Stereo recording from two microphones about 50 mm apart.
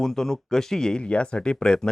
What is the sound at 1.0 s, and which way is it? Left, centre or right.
Speech, left.